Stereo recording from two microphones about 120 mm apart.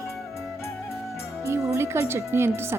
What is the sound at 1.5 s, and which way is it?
Speech, 20° right (ahead or behind).